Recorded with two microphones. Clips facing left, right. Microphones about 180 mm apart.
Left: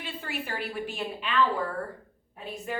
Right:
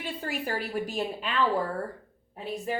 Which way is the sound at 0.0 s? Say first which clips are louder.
Right 3 dB; 40° right (ahead or behind).